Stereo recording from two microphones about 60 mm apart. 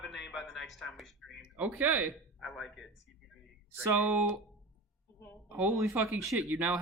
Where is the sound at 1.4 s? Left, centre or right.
Centre.